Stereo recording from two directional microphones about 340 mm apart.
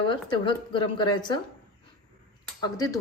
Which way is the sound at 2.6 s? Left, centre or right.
Centre.